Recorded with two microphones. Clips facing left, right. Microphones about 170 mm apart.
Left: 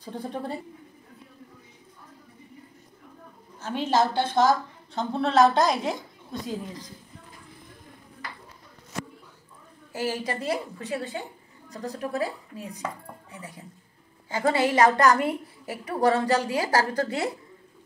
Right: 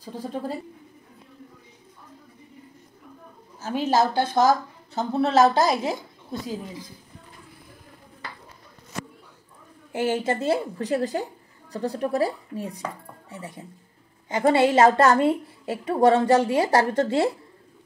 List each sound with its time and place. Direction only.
0.0 s a woman's voice: 5° right (ahead or behind)
3.8 s speech: 10° right (ahead or behind)
4.3 s a woman's voice: 45° right (ahead or behind)
4.9 s a woman's voice: 5° right (ahead or behind)
9.9 s a woman's voice: 25° right (ahead or behind)